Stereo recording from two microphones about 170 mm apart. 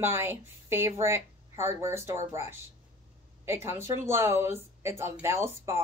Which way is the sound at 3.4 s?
15° right (ahead or behind).